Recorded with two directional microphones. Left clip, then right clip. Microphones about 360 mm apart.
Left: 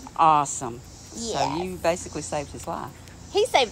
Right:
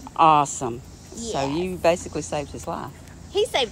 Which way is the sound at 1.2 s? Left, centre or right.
Left.